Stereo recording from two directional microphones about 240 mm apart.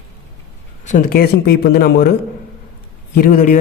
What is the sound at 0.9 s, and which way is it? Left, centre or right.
A man's voice, left.